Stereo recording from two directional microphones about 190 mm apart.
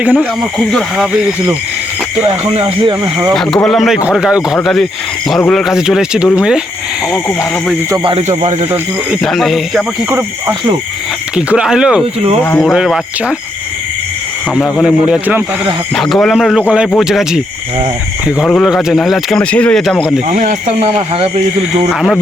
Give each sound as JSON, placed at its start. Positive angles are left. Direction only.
{"t": 0.0, "sound": "speech", "side_deg": -10}
{"t": 0.7, "sound": "speech", "side_deg": 0}
{"t": 2.2, "sound": "speech", "side_deg": -30}
{"t": 3.0, "sound": "speech", "side_deg": -15}
{"t": 3.3, "sound": "speech", "side_deg": 0}
{"t": 7.9, "sound": "speech", "side_deg": -25}
{"t": 8.3, "sound": "speech", "side_deg": -40}
{"t": 9.2, "sound": "speech", "side_deg": 0}
{"t": 11.3, "sound": "speech", "side_deg": -5}
{"t": 14.5, "sound": "speech", "side_deg": 0}
{"t": 20.2, "sound": "speech", "side_deg": -40}